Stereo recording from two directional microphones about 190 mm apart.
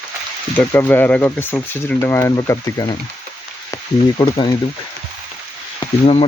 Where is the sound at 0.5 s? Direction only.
10° left (ahead or behind).